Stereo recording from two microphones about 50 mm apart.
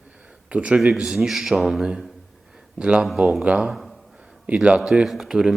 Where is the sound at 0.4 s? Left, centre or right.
Right; by 1.8 s centre.